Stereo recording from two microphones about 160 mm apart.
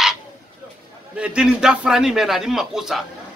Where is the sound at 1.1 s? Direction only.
5° right (ahead or behind).